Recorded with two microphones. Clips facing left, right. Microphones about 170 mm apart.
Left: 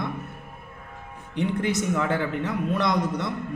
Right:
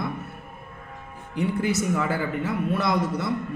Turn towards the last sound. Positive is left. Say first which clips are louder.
# even
turn(degrees=-5)  # may be behind; listen again after turning